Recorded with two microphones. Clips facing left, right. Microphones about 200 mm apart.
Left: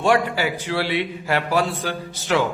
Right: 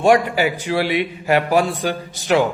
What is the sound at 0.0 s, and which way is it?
A man's voice, 15° right (ahead or behind).